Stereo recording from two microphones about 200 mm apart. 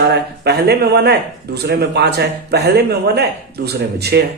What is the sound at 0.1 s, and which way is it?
Speech, 55° right (ahead or behind).